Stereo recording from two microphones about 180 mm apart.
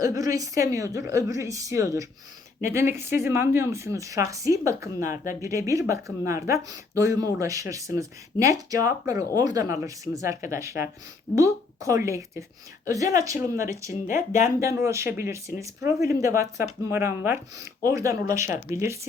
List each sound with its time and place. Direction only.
0.0 s speech: 20° right (ahead or behind)